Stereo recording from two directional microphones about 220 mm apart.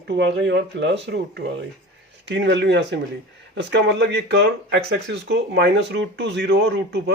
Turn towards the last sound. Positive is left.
turn(degrees=-50)  # may be behind; listen again after turning